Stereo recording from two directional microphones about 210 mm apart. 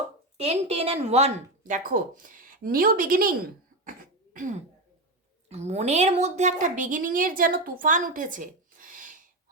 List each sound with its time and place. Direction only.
0.3 s a woman's voice: 30° right (ahead or behind)
3.8 s cough: 40° right (ahead or behind)
5.5 s a woman's voice: 30° right (ahead or behind)